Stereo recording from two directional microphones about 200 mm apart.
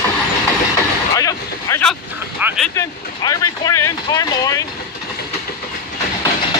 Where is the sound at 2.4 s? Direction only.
Centre (ahead or behind).